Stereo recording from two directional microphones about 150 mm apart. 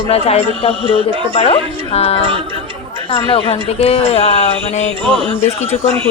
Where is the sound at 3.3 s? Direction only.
40° left (ahead or behind).